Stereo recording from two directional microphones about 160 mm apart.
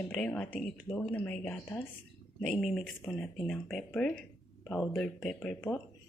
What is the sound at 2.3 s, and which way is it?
Speech, centre (ahead or behind).